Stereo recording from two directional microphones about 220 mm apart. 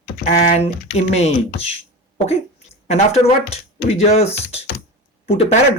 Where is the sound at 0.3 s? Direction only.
35° left (ahead or behind).